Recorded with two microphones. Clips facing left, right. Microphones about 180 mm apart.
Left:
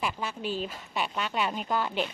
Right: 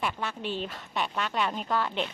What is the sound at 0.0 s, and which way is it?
A woman's voice, centre (ahead or behind).